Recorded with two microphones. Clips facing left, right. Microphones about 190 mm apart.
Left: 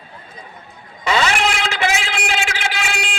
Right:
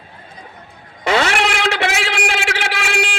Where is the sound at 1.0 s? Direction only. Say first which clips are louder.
Right 2 dB; 60° right (ahead or behind).